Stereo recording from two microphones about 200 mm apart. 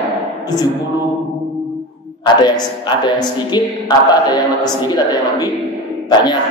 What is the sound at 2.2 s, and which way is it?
A woman's voice, 20° left (ahead or behind).